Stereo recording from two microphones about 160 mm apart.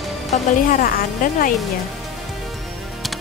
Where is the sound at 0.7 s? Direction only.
60° left (ahead or behind).